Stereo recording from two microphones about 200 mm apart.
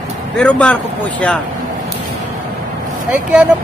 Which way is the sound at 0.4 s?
5° left (ahead or behind).